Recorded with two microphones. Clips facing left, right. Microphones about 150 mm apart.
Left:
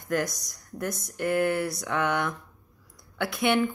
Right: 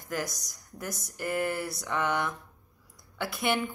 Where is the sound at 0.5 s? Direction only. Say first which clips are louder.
Left 6 dB; 60° left (ahead or behind).